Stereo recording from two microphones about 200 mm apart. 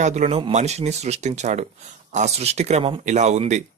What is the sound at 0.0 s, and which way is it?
Speech, 35° right (ahead or behind).